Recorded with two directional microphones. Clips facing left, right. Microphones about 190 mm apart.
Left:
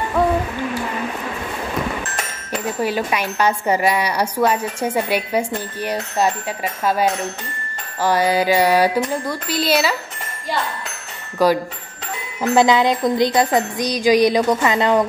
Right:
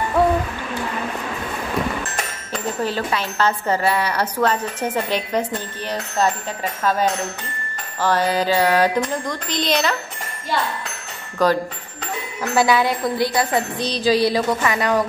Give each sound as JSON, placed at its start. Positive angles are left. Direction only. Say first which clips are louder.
{"t": 2.5, "sound": "speech", "louder": "left 2 dB", "side_deg": 10}
{"t": 11.4, "sound": "a woman's voice", "louder": "left 2 dB", "side_deg": 10}